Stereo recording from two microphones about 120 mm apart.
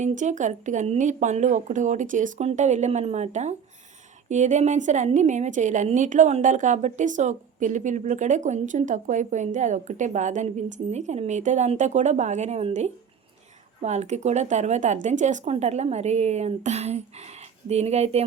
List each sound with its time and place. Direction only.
0.0 s a woman's voice: 85° right
4.3 s a woman's voice: 80° right; by 18.3 s 60° right (ahead or behind)